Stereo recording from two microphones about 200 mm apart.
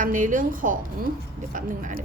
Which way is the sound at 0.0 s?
40° right (ahead or behind).